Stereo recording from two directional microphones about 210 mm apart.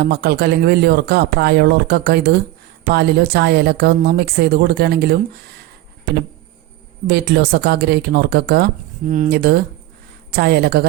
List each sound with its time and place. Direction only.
0.0 s speech: 50° right (ahead or behind)
7.1 s speech: 50° right (ahead or behind)